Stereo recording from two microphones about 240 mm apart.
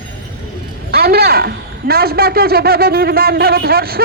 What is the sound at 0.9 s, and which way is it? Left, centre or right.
A man's voice, right.